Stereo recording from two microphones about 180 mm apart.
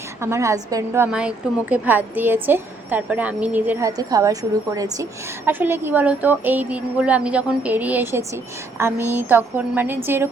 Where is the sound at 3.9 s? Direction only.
20° right (ahead or behind).